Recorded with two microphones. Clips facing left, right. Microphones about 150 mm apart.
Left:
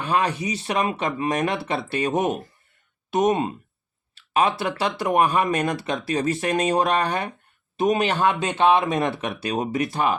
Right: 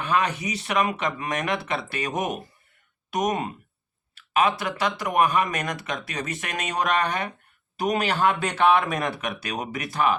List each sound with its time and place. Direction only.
0.0 s speech: 30° left (ahead or behind)
4.1 s a sound: 30° left (ahead or behind)
4.8 s speech: 30° left (ahead or behind)